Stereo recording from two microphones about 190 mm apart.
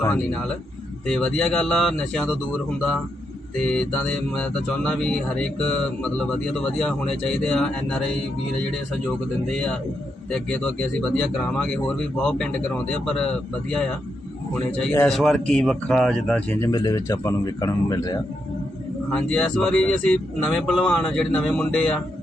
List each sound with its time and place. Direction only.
0.0 s speech: 10° left (ahead or behind)
3.6 s speech: 5° left (ahead or behind)
10.3 s speech: 5° left (ahead or behind)
14.9 s speech: 5° left (ahead or behind)
19.1 s speech: 5° left (ahead or behind)